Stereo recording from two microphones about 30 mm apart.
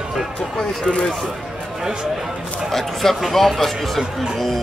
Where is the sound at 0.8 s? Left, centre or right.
Left.